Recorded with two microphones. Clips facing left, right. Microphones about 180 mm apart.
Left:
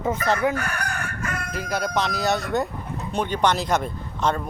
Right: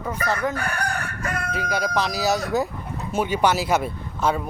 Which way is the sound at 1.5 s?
Centre (ahead or behind).